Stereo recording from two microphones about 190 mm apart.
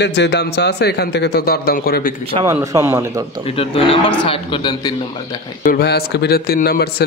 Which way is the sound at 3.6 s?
30° left (ahead or behind).